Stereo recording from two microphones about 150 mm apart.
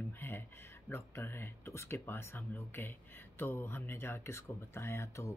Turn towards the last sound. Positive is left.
turn(degrees=20)  # may be behind; listen again after turning